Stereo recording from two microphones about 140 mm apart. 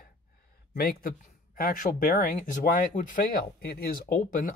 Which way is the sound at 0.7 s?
90° left.